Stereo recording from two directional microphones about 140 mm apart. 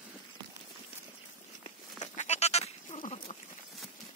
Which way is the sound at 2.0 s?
55° left (ahead or behind).